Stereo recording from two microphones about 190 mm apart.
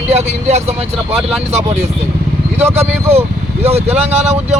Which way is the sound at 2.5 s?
10° right (ahead or behind).